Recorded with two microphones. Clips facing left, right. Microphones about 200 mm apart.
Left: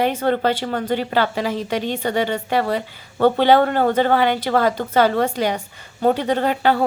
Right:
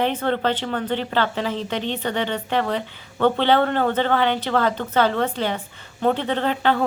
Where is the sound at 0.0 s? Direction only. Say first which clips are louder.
Left 3 dB; 10° left (ahead or behind).